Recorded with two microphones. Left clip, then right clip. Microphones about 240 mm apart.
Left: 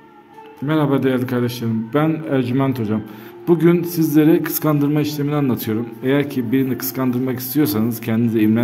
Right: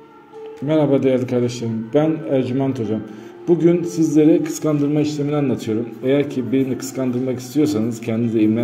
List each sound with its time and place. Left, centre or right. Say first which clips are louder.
0.7 s a man's voice: right 2 dB; left